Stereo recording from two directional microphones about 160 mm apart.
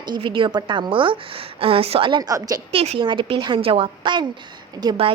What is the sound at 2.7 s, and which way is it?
A woman's voice, 35° right (ahead or behind).